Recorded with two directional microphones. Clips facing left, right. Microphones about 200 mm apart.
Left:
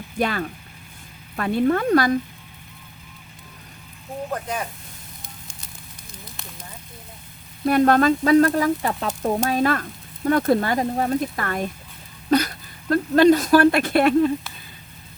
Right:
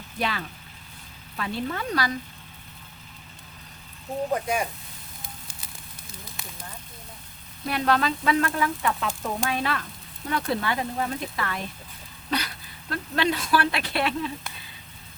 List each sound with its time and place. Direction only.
0.2 s speech: 50° left (ahead or behind)
4.3 s speech: 10° right (ahead or behind)
5.2 s fire: 5° right (ahead or behind)
7.6 s speech: 50° left (ahead or behind)